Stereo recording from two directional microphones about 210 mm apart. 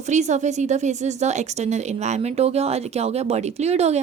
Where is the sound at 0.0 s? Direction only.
35° right (ahead or behind).